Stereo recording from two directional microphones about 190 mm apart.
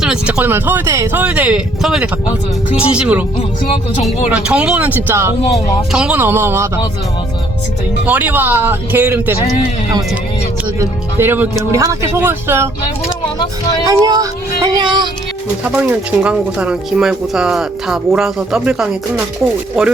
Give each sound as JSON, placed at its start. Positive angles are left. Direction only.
{"t": 0.0, "sound": "speech", "side_deg": -5}
{"t": 8.0, "sound": "speech", "side_deg": -10}
{"t": 10.8, "sound": "speech", "side_deg": -10}
{"t": 13.8, "sound": "speech", "side_deg": -20}
{"t": 15.6, "sound": "speech", "side_deg": -10}